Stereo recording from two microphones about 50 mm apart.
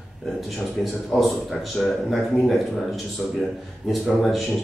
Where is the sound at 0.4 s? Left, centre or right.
Centre.